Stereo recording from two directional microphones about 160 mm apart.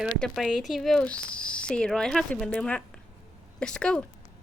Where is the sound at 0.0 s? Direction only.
Centre (ahead or behind).